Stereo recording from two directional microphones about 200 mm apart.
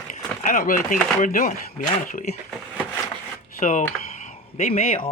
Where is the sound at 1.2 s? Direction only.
40° left (ahead or behind).